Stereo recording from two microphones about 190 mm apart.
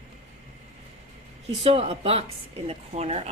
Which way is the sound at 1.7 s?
30° right (ahead or behind).